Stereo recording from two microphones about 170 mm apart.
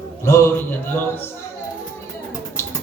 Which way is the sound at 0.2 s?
15° left (ahead or behind).